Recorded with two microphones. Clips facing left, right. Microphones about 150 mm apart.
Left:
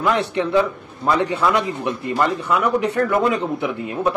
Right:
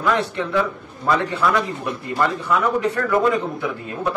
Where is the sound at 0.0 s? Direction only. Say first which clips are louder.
Left 2 dB; 20° left (ahead or behind).